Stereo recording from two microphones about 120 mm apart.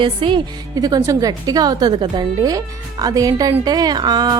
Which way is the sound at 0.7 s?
30° right (ahead or behind).